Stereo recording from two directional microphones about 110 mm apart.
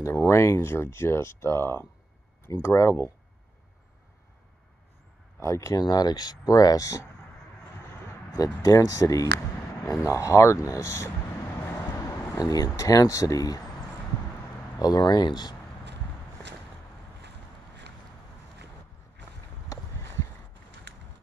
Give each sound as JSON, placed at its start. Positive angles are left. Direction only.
{"t": 0.0, "sound": "speech", "side_deg": 25}
{"t": 5.4, "sound": "speech", "side_deg": 25}
{"t": 8.3, "sound": "speech", "side_deg": 25}
{"t": 14.8, "sound": "speech", "side_deg": 35}
{"t": 19.7, "sound": "a sound", "side_deg": 25}